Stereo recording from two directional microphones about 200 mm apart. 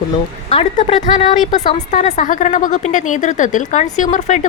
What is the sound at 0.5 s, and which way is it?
Speech, 30° left (ahead or behind).